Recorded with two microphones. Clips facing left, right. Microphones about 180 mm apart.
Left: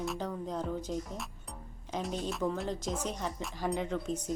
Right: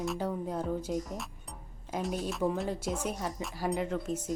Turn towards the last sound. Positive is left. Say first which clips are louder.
# right 1 dB
turn(degrees=-5)  # may be behind; listen again after turning